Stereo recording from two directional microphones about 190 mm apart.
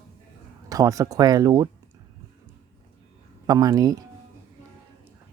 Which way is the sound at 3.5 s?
20° right (ahead or behind).